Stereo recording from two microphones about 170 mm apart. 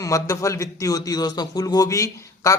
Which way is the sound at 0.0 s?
20° left (ahead or behind).